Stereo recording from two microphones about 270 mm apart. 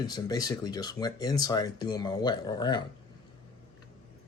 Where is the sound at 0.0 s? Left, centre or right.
Centre.